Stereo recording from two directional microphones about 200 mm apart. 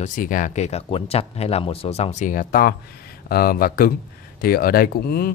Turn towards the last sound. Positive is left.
turn(degrees=50)  # may be behind; listen again after turning